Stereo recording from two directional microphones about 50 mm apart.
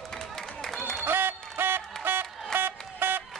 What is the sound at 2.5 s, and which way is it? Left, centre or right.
Music, right.